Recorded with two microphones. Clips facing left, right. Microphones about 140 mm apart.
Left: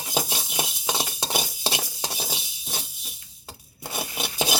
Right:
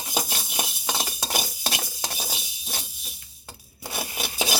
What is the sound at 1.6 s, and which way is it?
Stir, 20° left (ahead or behind).